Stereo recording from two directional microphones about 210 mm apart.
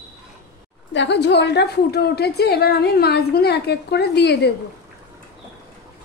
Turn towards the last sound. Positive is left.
turn(degrees=50)  # may be behind; listen again after turning